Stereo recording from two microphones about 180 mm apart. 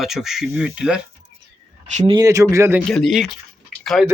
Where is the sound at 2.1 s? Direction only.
20° right (ahead or behind).